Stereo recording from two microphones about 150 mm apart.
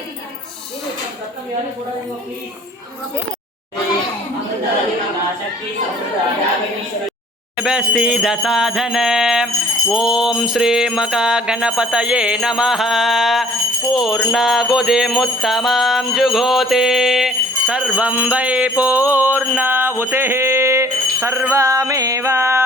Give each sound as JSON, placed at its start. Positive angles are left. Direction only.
{"t": 7.5, "sound": "mantra", "side_deg": -5}
{"t": 13.9, "sound": "music", "side_deg": 0}